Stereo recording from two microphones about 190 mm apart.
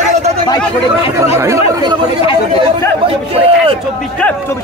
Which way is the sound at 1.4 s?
20° right (ahead or behind).